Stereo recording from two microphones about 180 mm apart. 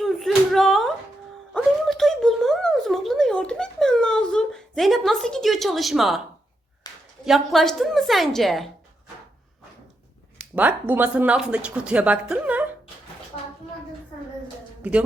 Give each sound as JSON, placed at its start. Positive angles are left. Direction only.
{"t": 0.0, "sound": "slap", "side_deg": 0}
{"t": 1.5, "sound": "a sound", "side_deg": 0}
{"t": 6.8, "sound": "a sound", "side_deg": 20}
{"t": 7.3, "sound": "a woman's voice", "side_deg": 0}
{"t": 10.5, "sound": "speech", "side_deg": -10}
{"t": 14.8, "sound": "speech", "side_deg": -5}